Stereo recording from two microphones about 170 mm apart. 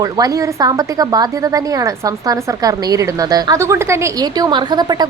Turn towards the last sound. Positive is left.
turn(degrees=-25)  # may be behind; listen again after turning